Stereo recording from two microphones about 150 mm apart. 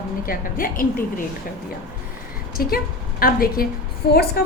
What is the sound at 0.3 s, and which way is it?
Speech, 70° left (ahead or behind).